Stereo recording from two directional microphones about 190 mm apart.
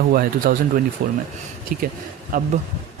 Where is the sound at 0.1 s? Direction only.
50° right (ahead or behind).